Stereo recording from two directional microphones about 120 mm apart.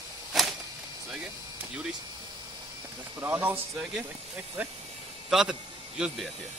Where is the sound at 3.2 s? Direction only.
15° right (ahead or behind).